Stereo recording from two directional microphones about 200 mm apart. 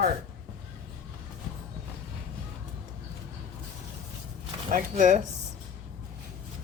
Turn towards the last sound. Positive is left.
turn(degrees=-40)  # may be behind; listen again after turning